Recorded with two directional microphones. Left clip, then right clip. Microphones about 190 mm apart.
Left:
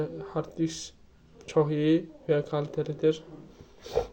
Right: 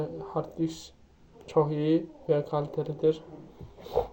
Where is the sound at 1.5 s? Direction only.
35° left (ahead or behind).